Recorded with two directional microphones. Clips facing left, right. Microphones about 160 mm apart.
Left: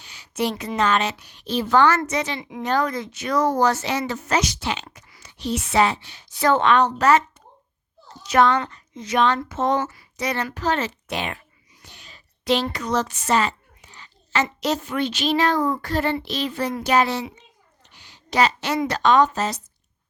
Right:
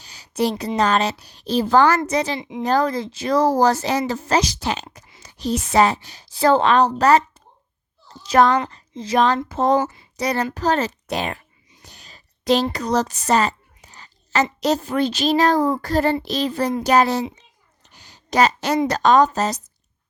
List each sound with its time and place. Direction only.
0.0 s a sound: 40° right (ahead or behind)
0.8 s speech: 35° right (ahead or behind)
2.4 s a woman's voice: 20° right (ahead or behind)
2.6 s a woman's voice: 35° right (ahead or behind)
9.8 s speech: 25° right (ahead or behind)
10.2 s speech: 35° right (ahead or behind)
11.8 s a sound: 40° right (ahead or behind)
14.6 s speech: 35° right (ahead or behind)
17.8 s a sound: 40° right (ahead or behind)
18.9 s speech: 40° right (ahead or behind)